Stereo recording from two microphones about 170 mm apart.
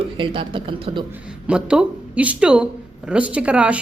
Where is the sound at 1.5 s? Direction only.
5° right (ahead or behind).